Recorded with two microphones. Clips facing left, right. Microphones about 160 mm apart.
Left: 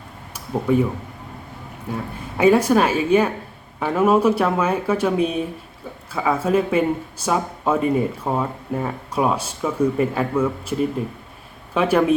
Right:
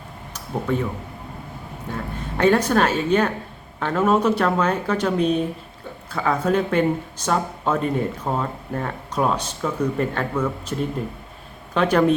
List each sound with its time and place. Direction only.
0.3 s speech: 10° left (ahead or behind)
1.9 s speech: 10° left (ahead or behind)